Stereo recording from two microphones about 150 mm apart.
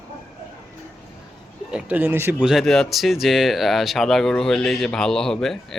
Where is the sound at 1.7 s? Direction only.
10° right (ahead or behind).